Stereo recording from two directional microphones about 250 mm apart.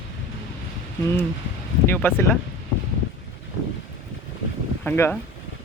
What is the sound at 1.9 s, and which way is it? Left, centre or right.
Speech, centre.